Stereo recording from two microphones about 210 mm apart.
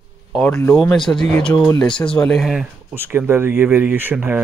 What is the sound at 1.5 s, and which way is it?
Speech, 15° left (ahead or behind).